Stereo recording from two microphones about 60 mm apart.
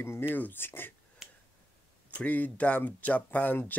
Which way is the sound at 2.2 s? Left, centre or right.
Left.